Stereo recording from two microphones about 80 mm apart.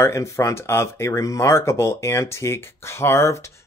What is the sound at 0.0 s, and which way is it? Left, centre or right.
Speech, left.